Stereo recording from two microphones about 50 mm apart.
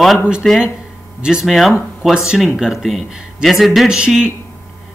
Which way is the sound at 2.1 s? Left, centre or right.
Centre.